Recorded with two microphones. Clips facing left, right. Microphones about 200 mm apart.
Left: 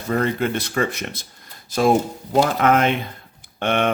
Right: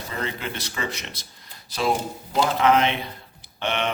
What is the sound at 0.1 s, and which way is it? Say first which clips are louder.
Speech: left 11 dB; 50° left (ahead or behind).